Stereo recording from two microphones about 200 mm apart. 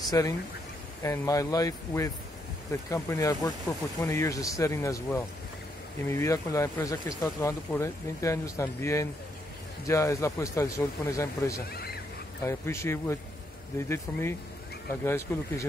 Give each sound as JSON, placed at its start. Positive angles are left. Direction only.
{"t": 0.1, "sound": "speech", "side_deg": 15}
{"t": 11.7, "sound": "a sound", "side_deg": 50}
{"t": 12.4, "sound": "speech", "side_deg": 15}